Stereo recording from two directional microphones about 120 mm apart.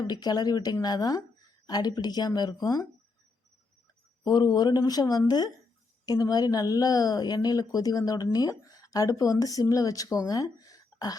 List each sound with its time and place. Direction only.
0.0 s speech: 35° left (ahead or behind)
4.2 s speech: 35° left (ahead or behind)